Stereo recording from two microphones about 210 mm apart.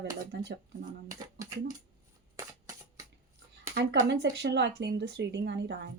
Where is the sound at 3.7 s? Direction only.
50° right (ahead or behind).